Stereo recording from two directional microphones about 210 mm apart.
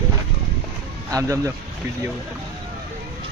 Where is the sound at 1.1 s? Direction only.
15° right (ahead or behind).